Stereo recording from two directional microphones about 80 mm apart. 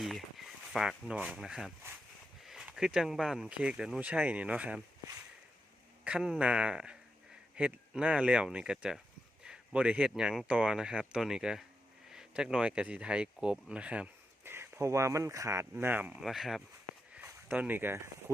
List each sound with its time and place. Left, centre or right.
0.0 s a sound: centre
1.1 s speech: centre
1.4 s speech: centre
6.1 s speech: centre
14.4 s speech: right
15.8 s speech: right
16.2 s speech: centre
17.5 s speech: right